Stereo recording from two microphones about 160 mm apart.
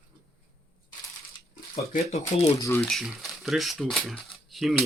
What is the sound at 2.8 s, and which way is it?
Speech, centre (ahead or behind).